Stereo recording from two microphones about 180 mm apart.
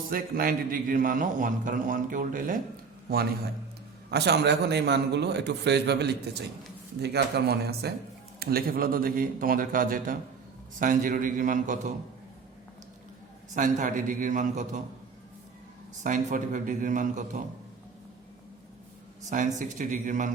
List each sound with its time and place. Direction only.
0.1 s a man's voice: 50° right (ahead or behind)
3.1 s a man's voice: 60° right (ahead or behind)
13.5 s a man's voice: 45° right (ahead or behind)
16.0 s a man's voice: 45° right (ahead or behind)
19.3 s a man's voice: 45° right (ahead or behind)